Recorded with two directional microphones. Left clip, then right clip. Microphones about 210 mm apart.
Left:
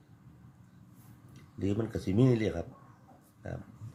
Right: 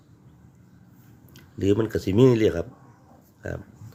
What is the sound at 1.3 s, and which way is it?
Speech, 35° right (ahead or behind).